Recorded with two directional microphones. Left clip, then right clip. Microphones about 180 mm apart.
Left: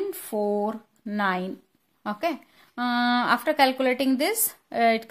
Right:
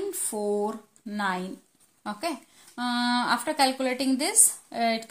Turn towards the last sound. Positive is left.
turn(degrees=50)  # may be behind; listen again after turning